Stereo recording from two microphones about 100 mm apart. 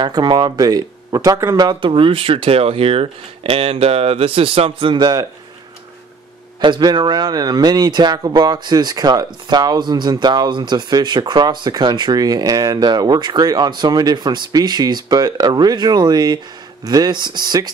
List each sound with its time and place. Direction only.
0.0 s speech: 50° right (ahead or behind)
6.6 s a man's voice: 45° right (ahead or behind)